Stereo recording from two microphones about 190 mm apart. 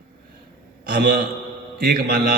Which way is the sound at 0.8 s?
55° right (ahead or behind).